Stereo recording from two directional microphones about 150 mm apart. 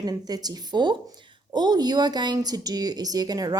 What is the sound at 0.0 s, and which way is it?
Speech, 25° right (ahead or behind).